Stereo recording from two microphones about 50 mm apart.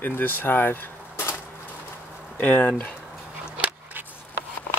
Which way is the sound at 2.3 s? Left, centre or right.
Left.